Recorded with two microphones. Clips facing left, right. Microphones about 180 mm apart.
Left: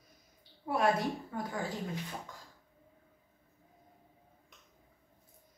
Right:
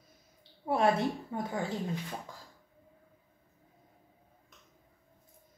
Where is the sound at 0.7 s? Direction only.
25° right (ahead or behind).